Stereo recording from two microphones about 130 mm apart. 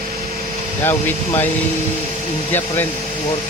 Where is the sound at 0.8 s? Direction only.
15° left (ahead or behind).